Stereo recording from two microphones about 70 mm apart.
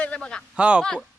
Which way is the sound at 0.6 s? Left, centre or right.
Centre.